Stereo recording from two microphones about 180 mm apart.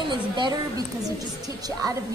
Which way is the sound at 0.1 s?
25° right (ahead or behind).